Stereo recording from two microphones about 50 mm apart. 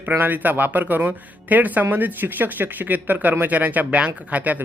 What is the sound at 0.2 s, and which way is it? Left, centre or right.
Speech, right.